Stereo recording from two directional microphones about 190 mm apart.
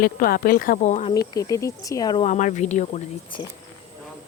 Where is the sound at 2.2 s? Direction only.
40° left (ahead or behind).